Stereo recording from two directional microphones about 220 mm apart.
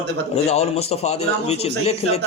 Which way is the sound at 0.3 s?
30° left (ahead or behind).